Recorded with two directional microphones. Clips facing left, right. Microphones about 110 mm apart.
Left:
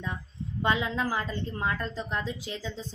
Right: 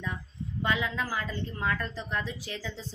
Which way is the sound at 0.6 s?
25° left (ahead or behind).